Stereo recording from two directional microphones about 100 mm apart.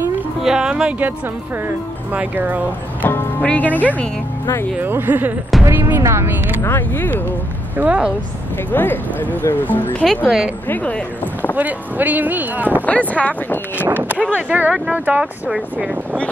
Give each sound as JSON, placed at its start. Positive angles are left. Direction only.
{"t": 0.4, "sound": "speech", "side_deg": -5}
{"t": 2.1, "sound": "speech", "side_deg": -15}
{"t": 3.0, "sound": "speech", "side_deg": 20}
{"t": 4.7, "sound": "speech", "side_deg": -20}
{"t": 6.6, "sound": "speech", "side_deg": 20}
{"t": 7.7, "sound": "speech", "side_deg": -15}
{"t": 8.7, "sound": "speech", "side_deg": 20}
{"t": 10.2, "sound": "a woman's voice", "side_deg": -5}
{"t": 10.7, "sound": "speech", "side_deg": 15}
{"t": 11.5, "sound": "speech", "side_deg": -15}
{"t": 12.8, "sound": "speech", "side_deg": 15}
{"t": 13.7, "sound": "speech", "side_deg": -20}